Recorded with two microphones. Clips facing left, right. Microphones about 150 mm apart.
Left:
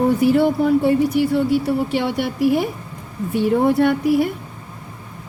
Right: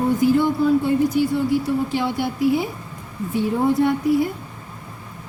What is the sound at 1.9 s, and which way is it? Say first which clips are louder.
Speech: left 2 dB; 75° left (ahead or behind).